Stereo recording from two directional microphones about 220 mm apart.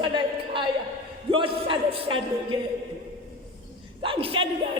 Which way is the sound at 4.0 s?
25° right (ahead or behind).